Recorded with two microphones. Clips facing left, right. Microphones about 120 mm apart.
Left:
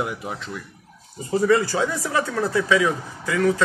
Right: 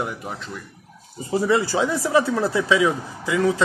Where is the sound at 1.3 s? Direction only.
20° right (ahead or behind).